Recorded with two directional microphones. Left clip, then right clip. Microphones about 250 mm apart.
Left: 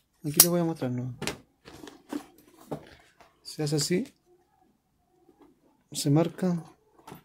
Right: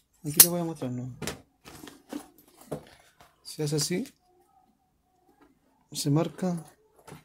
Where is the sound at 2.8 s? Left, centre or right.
Centre.